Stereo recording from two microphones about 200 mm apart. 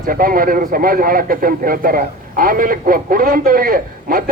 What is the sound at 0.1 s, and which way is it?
A man's voice, 45° right (ahead or behind).